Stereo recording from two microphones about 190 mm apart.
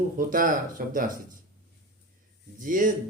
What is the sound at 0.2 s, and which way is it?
Speech, 45° right (ahead or behind).